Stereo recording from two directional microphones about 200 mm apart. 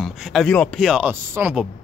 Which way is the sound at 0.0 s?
Centre (ahead or behind).